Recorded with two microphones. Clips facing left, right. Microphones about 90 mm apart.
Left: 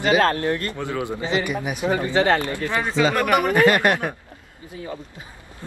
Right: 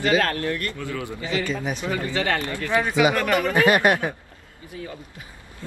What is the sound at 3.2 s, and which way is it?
Speech, 20° left (ahead or behind).